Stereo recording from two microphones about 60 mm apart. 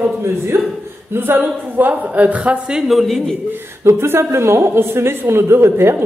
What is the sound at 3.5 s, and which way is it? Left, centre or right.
A woman's voice, right.